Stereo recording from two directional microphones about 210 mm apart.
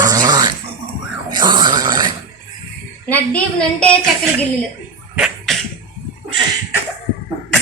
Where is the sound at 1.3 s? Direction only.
20° right (ahead or behind).